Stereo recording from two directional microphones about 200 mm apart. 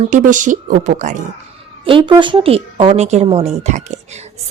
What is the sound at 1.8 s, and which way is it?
A woman's voice, 25° right (ahead or behind).